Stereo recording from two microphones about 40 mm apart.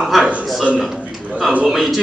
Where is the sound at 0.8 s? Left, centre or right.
Centre.